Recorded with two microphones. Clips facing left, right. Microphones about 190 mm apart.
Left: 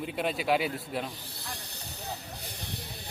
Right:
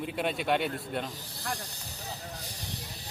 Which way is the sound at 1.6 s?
65° left (ahead or behind).